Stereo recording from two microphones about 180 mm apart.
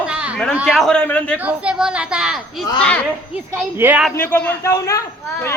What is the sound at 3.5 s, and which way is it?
Speech, 10° right (ahead or behind).